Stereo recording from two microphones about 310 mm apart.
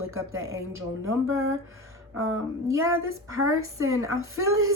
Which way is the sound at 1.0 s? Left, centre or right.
Right.